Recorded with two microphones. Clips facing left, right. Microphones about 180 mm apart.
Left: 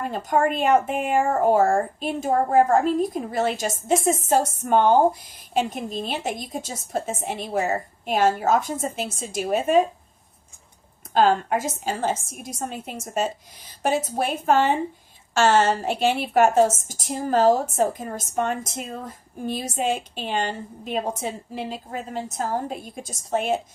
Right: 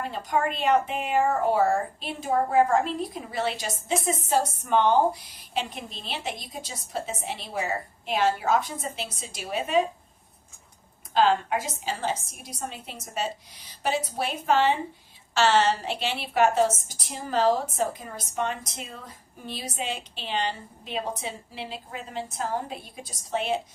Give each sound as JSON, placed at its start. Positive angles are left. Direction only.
{"t": 0.0, "sound": "a woman's voice", "side_deg": 45}
{"t": 11.1, "sound": "a woman's voice", "side_deg": 45}